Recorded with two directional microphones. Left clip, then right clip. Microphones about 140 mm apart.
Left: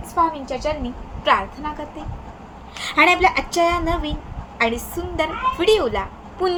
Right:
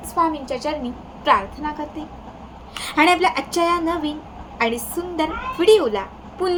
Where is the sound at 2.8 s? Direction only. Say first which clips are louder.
Left 1 dB; 10° right (ahead or behind).